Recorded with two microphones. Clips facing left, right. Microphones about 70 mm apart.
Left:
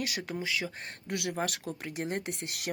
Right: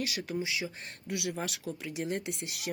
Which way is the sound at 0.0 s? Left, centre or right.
Left.